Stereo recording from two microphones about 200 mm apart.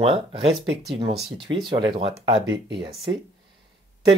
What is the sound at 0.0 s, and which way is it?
Speech, 30° right (ahead or behind).